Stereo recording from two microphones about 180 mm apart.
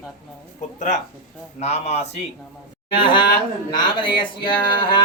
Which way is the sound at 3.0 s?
25° left (ahead or behind).